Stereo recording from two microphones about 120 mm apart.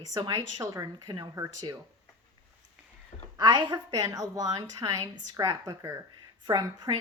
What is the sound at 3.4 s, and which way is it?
Speech, 40° right (ahead or behind).